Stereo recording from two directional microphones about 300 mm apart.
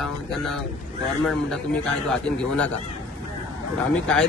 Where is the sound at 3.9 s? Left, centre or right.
Centre.